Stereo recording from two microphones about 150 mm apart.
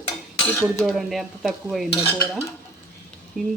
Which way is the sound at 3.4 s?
5° right (ahead or behind).